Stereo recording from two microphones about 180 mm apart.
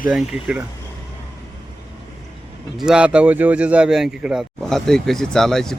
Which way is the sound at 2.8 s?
5° right (ahead or behind).